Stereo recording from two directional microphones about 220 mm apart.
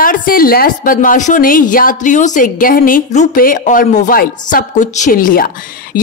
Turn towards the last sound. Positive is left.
turn(degrees=40)  # may be behind; listen again after turning